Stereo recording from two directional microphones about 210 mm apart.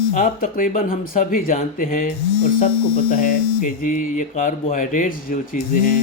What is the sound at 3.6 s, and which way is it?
Speech, 40° left (ahead or behind).